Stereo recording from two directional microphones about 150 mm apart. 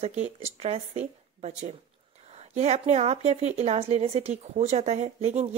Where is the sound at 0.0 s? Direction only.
50° right (ahead or behind).